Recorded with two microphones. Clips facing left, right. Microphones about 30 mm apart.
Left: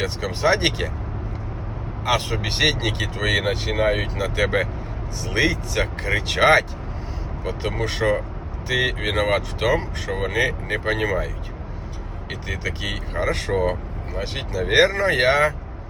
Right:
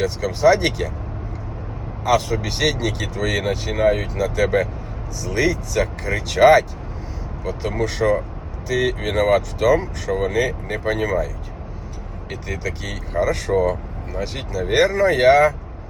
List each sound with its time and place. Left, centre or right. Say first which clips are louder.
0.0 s speech: right 5 dB; left
2.0 s speech: right 3 dB; left
12.3 s speech: right 1 dB; left